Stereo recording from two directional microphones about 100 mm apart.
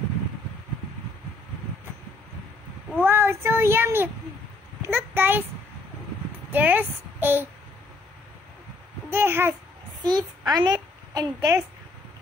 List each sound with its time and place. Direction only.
3.0 s a child's voice: 20° right (ahead or behind)
6.5 s a child's voice: 20° right (ahead or behind)
9.1 s a child's voice: 25° right (ahead or behind)
10.0 s a child's voice: 40° right (ahead or behind)